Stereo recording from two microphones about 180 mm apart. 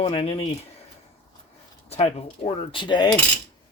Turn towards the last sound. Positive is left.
turn(degrees=25)  # may be behind; listen again after turning